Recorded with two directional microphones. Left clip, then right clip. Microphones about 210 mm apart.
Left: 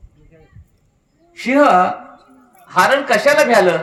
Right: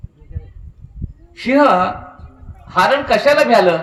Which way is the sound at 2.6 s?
25° left (ahead or behind).